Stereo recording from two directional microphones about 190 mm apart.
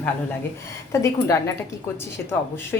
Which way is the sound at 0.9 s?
15° left (ahead or behind).